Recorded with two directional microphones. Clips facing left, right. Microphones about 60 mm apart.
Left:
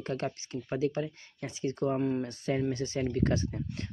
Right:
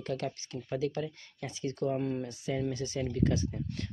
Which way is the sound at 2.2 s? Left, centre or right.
Left.